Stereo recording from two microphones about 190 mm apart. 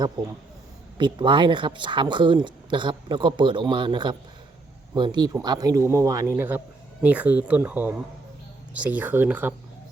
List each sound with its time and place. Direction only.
0.9 s speech: 25° right (ahead or behind); by 9.6 s 10° right (ahead or behind)